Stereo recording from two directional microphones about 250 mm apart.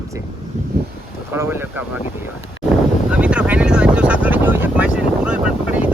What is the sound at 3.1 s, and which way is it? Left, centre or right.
Vehicle, centre.